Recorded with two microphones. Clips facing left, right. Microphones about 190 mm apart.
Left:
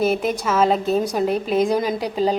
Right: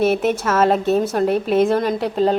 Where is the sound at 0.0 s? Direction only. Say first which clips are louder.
Right 3 dB; 5° right (ahead or behind).